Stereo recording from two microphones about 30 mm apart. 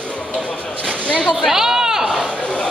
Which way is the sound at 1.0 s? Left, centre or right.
Left.